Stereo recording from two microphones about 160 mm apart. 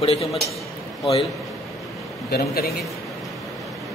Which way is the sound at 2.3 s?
75° left (ahead or behind).